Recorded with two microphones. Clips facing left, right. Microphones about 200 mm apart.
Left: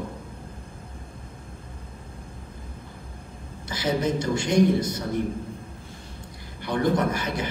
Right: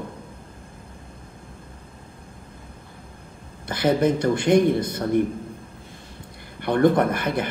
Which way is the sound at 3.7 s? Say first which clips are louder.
Right 5 dB; 55° right (ahead or behind).